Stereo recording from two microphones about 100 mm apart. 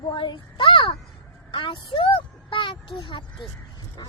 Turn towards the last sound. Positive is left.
turn(degrees=55)  # may be behind; listen again after turning